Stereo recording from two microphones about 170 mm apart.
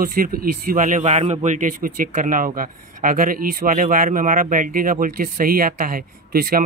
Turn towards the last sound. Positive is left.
turn(degrees=-60)  # may be behind; listen again after turning